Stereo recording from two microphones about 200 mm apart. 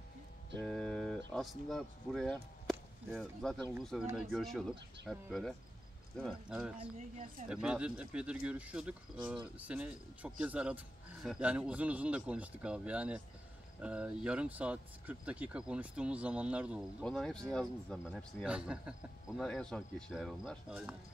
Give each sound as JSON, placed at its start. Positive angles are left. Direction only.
{"t": 0.6, "sound": "a sound", "side_deg": 0}
{"t": 1.3, "sound": "speech", "side_deg": 0}
{"t": 4.0, "sound": "speech", "side_deg": -10}
{"t": 4.3, "sound": "speech", "side_deg": 0}
{"t": 7.0, "sound": "speech", "side_deg": -40}
{"t": 7.4, "sound": "speech", "side_deg": -5}